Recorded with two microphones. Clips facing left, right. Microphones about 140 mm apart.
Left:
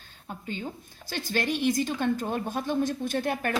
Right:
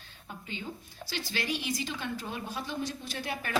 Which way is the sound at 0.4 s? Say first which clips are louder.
Left 5 dB; 50° left (ahead or behind).